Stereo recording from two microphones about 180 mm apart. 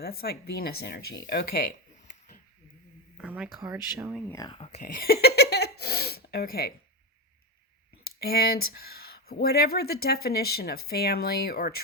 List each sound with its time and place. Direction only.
0.0 s speech: 60° left (ahead or behind)
3.2 s a sound: 5° right (ahead or behind)
3.7 s speech: 15° right (ahead or behind)
4.3 s speech: 20° left (ahead or behind)
4.5 s speech: 30° left (ahead or behind)
4.8 s a sound: 50° left (ahead or behind)
8.2 s speech: 60° left (ahead or behind)